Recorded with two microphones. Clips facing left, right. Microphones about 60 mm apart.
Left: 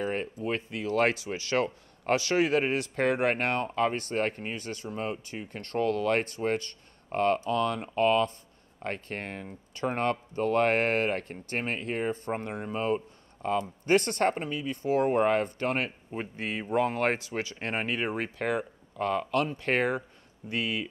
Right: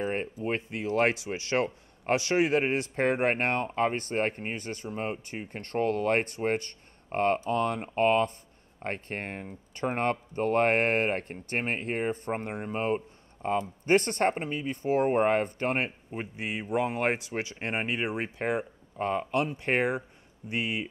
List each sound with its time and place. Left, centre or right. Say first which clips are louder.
0.0 s speech: even; right
16.2 s speech: left 1 dB; centre